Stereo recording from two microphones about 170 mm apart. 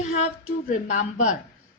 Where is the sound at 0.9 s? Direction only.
45° left (ahead or behind).